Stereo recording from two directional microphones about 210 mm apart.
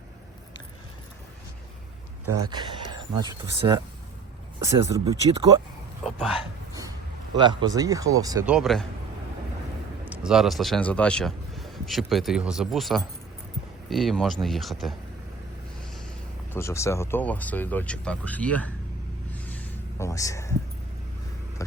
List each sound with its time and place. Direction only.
2.2 s speech: 20° right (ahead or behind)
6.0 s speech: centre (ahead or behind)
7.3 s speech: 20° right (ahead or behind)
8.4 s speech: centre (ahead or behind)
10.1 s speech: 5° right (ahead or behind)
16.5 s speech: 10° left (ahead or behind)
19.3 s vehicle: 5° left (ahead or behind)